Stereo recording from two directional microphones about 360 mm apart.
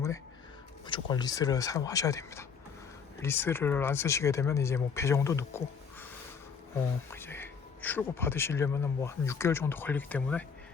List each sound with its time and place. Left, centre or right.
0.9 s speech: centre
7.1 s speech: centre